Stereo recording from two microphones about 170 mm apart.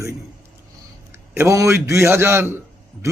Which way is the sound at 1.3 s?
15° right (ahead or behind).